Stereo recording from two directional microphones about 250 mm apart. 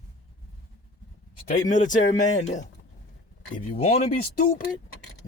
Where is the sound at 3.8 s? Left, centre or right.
Left.